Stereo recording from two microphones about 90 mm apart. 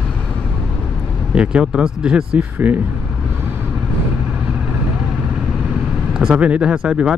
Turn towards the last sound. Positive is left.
turn(degrees=-10)  # may be behind; listen again after turning